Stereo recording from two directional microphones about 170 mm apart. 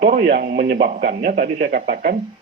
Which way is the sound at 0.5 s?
60° right (ahead or behind).